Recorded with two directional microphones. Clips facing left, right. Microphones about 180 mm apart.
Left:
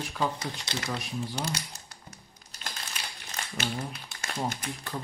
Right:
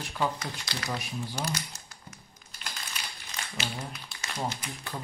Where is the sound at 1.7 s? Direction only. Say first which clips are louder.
Even; 35° left (ahead or behind).